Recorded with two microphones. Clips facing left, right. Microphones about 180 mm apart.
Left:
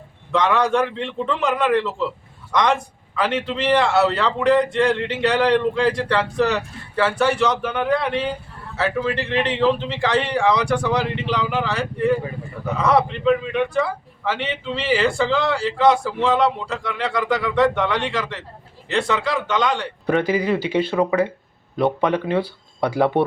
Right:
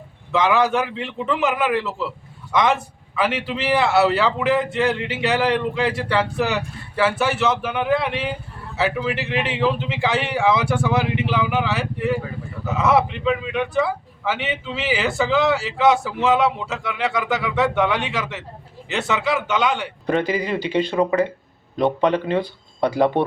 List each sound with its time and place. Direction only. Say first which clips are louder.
0.3 s a man's voice: even; 5° right (ahead or behind)
20.1 s speech: left 2 dB; 10° left (ahead or behind)